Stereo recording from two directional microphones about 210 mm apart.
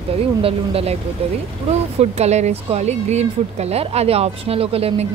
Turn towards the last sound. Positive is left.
turn(degrees=-30)  # may be behind; listen again after turning